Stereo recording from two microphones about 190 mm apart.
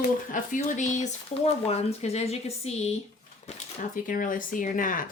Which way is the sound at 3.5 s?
45° left (ahead or behind).